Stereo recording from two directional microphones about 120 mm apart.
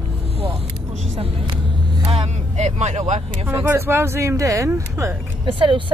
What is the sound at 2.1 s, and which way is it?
Speech, 65° right (ahead or behind).